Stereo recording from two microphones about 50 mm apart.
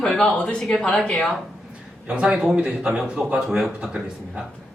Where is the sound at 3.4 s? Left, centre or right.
Centre.